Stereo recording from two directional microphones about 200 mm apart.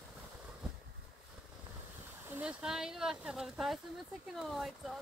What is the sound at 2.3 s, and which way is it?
Speech, 5° right (ahead or behind).